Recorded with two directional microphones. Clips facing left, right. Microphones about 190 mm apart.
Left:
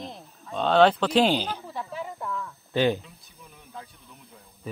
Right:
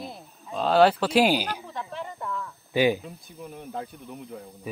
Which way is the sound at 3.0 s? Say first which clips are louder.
Right 11 dB; 50° right (ahead or behind).